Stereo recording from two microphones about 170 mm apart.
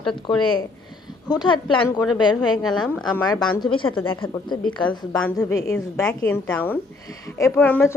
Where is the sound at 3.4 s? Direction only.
25° left (ahead or behind).